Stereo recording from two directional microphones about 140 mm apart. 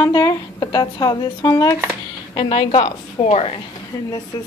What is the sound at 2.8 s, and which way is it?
Speech, 50° left (ahead or behind).